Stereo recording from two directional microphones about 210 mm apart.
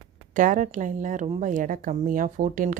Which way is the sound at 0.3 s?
40° right (ahead or behind).